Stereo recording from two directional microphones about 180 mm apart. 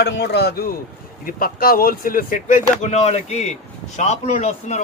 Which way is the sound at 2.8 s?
35° left (ahead or behind).